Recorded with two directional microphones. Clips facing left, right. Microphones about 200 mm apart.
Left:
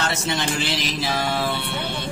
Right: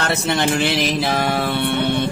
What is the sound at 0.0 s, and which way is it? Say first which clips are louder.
Music: right 5 dB; 60° right (ahead or behind).